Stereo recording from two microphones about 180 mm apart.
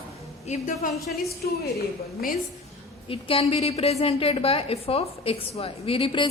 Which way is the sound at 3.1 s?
30° left (ahead or behind).